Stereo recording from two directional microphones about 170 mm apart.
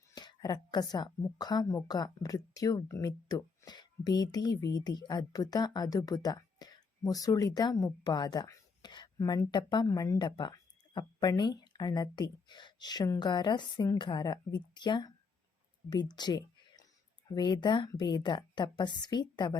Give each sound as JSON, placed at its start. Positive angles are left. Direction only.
{"t": 0.1, "sound": "speech", "side_deg": 25}